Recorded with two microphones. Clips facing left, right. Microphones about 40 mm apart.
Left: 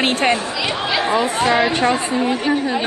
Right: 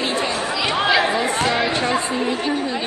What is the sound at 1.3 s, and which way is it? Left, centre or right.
Speech, centre.